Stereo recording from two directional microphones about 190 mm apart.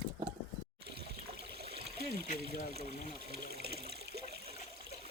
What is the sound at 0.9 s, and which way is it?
Trickle, 60° right (ahead or behind).